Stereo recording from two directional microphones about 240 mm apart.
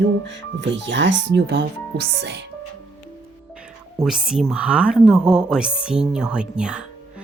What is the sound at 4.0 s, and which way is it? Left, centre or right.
A woman's voice, centre.